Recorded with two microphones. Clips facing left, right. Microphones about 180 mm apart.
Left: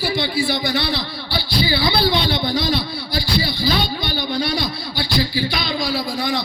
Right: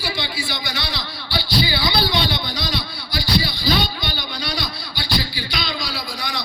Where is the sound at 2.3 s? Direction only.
55° left (ahead or behind).